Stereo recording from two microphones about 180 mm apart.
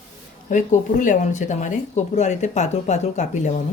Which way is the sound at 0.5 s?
45° left (ahead or behind).